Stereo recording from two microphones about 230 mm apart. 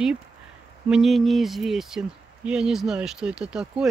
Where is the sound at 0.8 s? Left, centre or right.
Centre.